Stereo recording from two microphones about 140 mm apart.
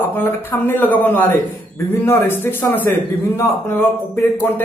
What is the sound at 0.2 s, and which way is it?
A man's voice, 15° left (ahead or behind).